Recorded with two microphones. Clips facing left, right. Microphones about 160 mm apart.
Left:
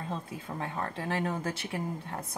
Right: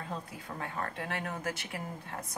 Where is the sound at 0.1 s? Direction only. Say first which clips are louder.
Left 3 dB; 30° left (ahead or behind).